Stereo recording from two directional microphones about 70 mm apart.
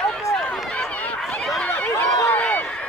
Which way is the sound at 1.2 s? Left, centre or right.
Centre.